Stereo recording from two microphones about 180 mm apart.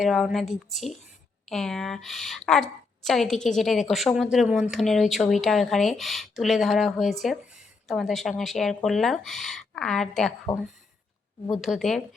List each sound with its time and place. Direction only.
0.0 s speech: centre (ahead or behind)
11.5 s speech: centre (ahead or behind)